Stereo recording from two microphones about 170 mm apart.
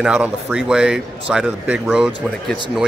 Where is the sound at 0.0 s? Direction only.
5° right (ahead or behind).